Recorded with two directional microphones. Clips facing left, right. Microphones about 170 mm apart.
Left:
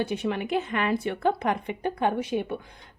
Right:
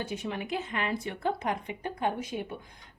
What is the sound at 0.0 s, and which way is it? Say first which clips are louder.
A woman's voice: left 7 dB; 70° left (ahead or behind).